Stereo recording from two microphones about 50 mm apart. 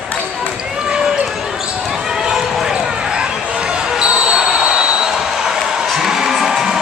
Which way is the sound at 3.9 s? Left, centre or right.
Right.